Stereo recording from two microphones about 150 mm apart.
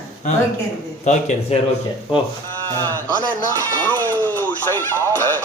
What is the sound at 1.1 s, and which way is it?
Speech, 50° left (ahead or behind).